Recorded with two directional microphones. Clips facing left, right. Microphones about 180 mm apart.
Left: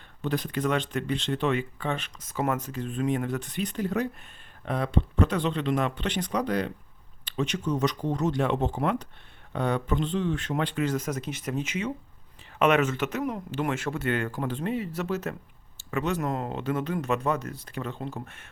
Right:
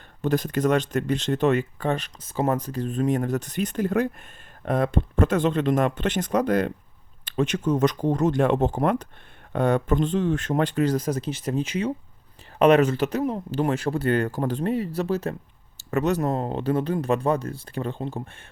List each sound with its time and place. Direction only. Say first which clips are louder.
0.2 s speech: right 5 dB; 45° right (ahead or behind)
15.8 s speech: right 5 dB; 40° right (ahead or behind)